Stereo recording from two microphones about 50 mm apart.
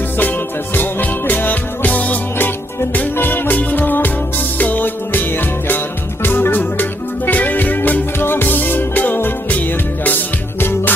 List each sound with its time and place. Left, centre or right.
0.2 s music: left
8.2 s music: left
10.6 s music: left